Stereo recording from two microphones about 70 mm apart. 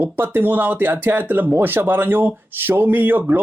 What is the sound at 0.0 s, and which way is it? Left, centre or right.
Speech, right.